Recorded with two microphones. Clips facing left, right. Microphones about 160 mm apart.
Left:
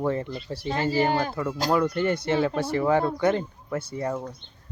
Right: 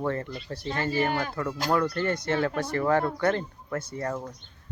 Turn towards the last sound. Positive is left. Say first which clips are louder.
# left 2 dB
turn(degrees=10)  # may be behind; listen again after turning